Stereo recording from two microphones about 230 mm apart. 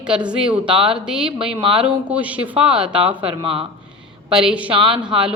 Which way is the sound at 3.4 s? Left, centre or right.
Right.